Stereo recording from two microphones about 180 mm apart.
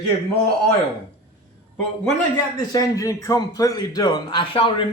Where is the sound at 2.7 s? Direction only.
20° left (ahead or behind).